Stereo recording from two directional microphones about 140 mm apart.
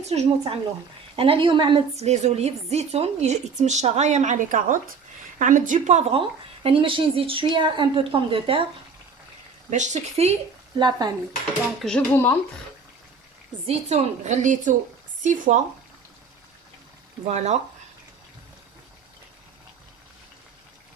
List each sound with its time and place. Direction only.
0.0 s a woman's voice: 50° right (ahead or behind)
2.0 s a woman's voice: 50° right (ahead or behind)
9.6 s a woman's voice: 60° right (ahead or behind)
10.8 s speech: 30° right (ahead or behind)
11.8 s speech: 5° left (ahead or behind)
13.7 s a woman's voice: 55° right (ahead or behind)
17.2 s a woman's voice: 55° right (ahead or behind)